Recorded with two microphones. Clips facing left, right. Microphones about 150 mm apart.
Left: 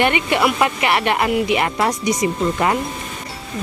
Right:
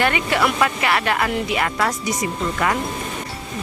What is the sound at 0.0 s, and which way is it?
Speech, 20° left (ahead or behind).